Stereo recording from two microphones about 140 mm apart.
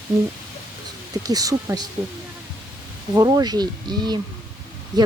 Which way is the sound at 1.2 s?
25° right (ahead or behind).